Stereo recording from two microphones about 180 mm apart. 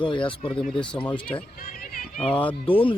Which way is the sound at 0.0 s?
25° left (ahead or behind).